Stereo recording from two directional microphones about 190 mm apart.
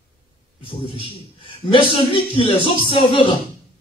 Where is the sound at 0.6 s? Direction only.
25° left (ahead or behind).